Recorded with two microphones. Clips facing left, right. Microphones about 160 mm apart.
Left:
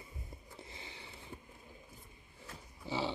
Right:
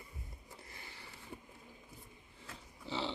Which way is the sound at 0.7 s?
20° left (ahead or behind).